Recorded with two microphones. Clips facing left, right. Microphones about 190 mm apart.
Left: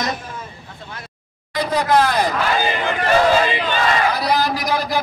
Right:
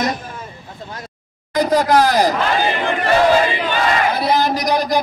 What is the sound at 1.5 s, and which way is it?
Speech, 45° right (ahead or behind).